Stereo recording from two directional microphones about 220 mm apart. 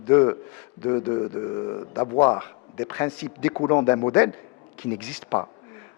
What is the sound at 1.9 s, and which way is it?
A man's voice, 20° left (ahead or behind).